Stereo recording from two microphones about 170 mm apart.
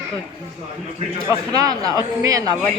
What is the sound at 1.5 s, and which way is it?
A man's voice, 20° right (ahead or behind).